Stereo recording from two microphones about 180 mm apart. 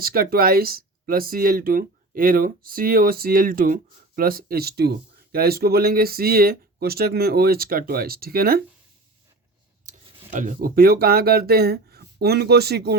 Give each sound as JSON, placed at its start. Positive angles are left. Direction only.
{"t": 0.0, "sound": "speech", "side_deg": -55}
{"t": 10.3, "sound": "speech", "side_deg": -50}